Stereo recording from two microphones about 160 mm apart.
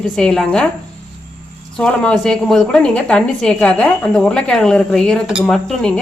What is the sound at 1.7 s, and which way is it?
A woman's voice, 5° left (ahead or behind).